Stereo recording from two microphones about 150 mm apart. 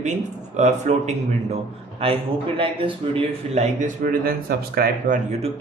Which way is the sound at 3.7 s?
60° right (ahead or behind).